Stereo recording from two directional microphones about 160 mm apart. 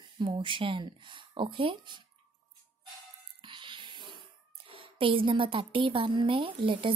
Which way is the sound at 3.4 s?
30° right (ahead or behind).